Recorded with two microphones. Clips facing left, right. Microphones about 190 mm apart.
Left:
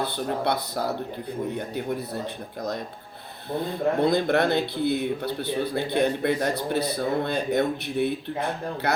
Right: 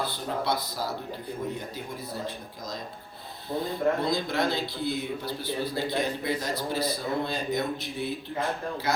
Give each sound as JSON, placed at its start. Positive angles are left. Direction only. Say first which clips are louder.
{"t": 0.0, "sound": "speech", "louder": "left 4 dB", "side_deg": 65}
{"t": 4.0, "sound": "speech", "louder": "left 6 dB", "side_deg": 60}